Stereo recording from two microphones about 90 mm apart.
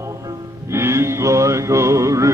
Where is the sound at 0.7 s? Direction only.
30° right (ahead or behind).